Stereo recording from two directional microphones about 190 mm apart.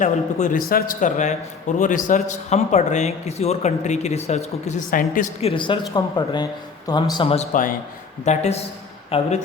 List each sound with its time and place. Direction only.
0.0 s speech: 40° left (ahead or behind)
7.5 s a man's voice: 45° left (ahead or behind); by 9.4 s 30° left (ahead or behind)